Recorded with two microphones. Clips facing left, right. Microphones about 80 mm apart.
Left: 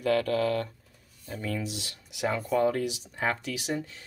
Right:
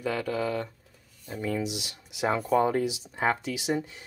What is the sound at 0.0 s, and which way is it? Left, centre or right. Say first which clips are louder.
Speech: left 3 dB; centre.